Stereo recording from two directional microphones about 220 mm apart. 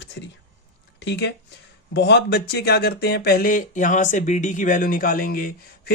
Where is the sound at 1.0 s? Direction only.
50° left (ahead or behind).